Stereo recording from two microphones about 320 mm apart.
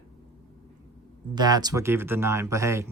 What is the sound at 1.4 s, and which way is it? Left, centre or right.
Speech, centre.